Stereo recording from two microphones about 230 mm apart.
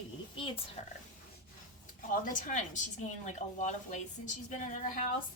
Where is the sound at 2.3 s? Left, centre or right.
Left.